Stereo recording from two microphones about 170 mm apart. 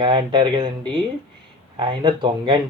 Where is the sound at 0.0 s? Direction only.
25° right (ahead or behind).